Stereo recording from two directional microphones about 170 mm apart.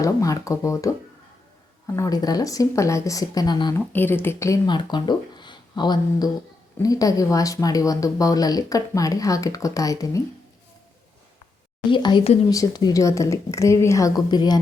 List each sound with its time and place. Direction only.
0.0 s speech: 20° left (ahead or behind)
3.8 s speech: 10° left (ahead or behind)
11.9 s speech: 30° left (ahead or behind)